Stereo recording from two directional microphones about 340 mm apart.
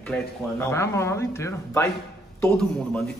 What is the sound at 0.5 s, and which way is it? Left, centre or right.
A man's voice, centre.